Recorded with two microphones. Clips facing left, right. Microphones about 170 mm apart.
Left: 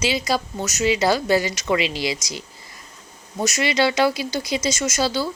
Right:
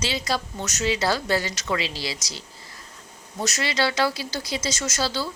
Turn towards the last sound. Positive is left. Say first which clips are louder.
# left 5 dB
turn(degrees=15)  # may be behind; listen again after turning